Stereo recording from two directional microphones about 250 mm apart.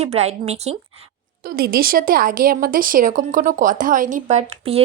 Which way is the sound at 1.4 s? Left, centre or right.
Right.